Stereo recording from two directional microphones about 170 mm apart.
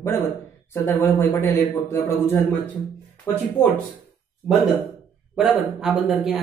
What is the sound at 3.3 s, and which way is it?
Speech, 15° left (ahead or behind).